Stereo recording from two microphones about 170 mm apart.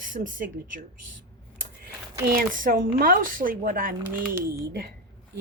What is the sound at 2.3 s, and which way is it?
A woman's voice, 55° right (ahead or behind).